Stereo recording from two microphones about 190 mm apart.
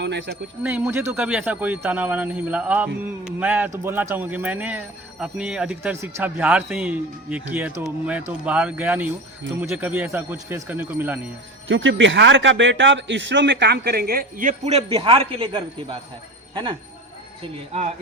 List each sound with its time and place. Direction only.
0.0 s speech: 65° right (ahead or behind)
0.6 s speech: 10° right (ahead or behind)
11.7 s speech: 80° right; by 16.0 s 25° right (ahead or behind)